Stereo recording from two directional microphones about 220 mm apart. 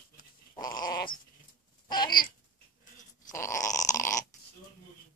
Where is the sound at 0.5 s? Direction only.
15° left (ahead or behind).